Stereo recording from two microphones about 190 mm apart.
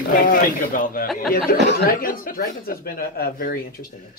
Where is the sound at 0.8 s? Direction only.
45° left (ahead or behind).